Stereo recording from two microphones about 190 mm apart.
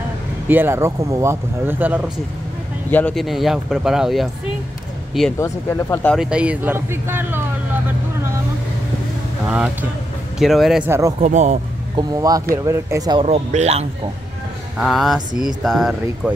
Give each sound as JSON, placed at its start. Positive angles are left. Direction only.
{"t": 0.5, "sound": "speech", "side_deg": -10}
{"t": 2.9, "sound": "speech", "side_deg": 5}
{"t": 5.4, "sound": "speech", "side_deg": 15}
{"t": 6.1, "sound": "speech", "side_deg": -5}
{"t": 9.5, "sound": "speech", "side_deg": -10}
{"t": 10.9, "sound": "speech", "side_deg": -15}
{"t": 11.1, "sound": "speech", "side_deg": -35}
{"t": 12.0, "sound": "speech", "side_deg": -20}
{"t": 13.2, "sound": "speech", "side_deg": -35}
{"t": 14.8, "sound": "speech", "side_deg": 0}